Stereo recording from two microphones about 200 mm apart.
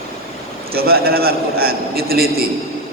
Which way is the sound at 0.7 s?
50° right (ahead or behind).